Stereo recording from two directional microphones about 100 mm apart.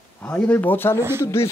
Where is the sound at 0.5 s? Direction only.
20° left (ahead or behind).